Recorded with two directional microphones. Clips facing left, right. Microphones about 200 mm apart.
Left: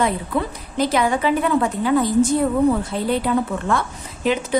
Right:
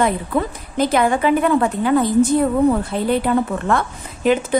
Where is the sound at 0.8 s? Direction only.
50° right (ahead or behind).